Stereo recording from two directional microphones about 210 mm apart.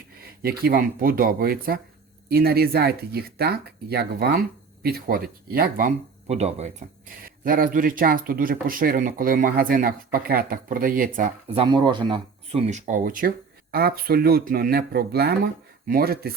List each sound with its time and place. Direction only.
0.4 s speech: 45° right (ahead or behind)
7.3 s speech: 40° right (ahead or behind)
11.5 s speech: 25° right (ahead or behind); by 16.3 s 45° right (ahead or behind)